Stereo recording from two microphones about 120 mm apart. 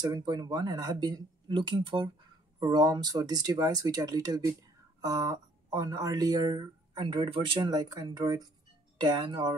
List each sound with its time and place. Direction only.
0.0 s speech: 35° right (ahead or behind)